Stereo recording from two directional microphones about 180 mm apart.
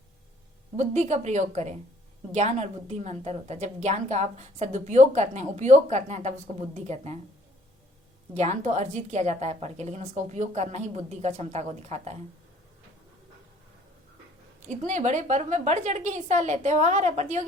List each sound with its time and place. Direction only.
0.8 s a woman's voice: 40° right (ahead or behind)
8.3 s a woman's voice: 40° right (ahead or behind)
14.7 s a woman's voice: 40° right (ahead or behind)